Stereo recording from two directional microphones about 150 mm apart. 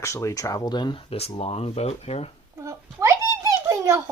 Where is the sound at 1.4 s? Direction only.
40° left (ahead or behind).